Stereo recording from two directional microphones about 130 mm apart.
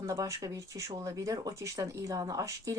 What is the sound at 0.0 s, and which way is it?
A woman's voice, 25° right (ahead or behind).